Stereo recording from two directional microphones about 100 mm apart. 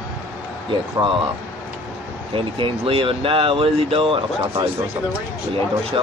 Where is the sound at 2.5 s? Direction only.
60° right (ahead or behind).